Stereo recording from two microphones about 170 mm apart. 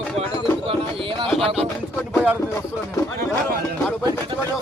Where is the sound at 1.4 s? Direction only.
35° right (ahead or behind).